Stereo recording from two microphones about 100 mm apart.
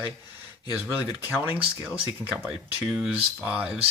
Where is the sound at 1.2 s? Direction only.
20° right (ahead or behind).